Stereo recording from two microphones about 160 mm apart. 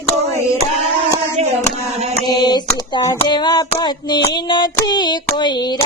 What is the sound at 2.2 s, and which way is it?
Mantra, 25° left (ahead or behind).